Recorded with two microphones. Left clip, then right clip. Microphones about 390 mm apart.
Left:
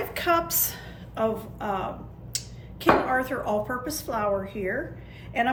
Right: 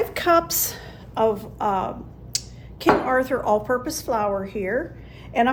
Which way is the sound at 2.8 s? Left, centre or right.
Centre.